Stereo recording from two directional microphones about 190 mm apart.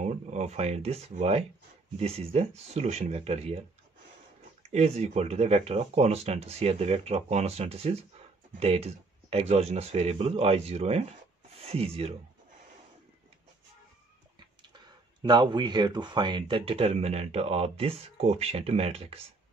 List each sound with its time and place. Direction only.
0.0 s speech: 35° right (ahead or behind)
4.6 s speech: 35° right (ahead or behind)
15.2 s speech: 25° right (ahead or behind)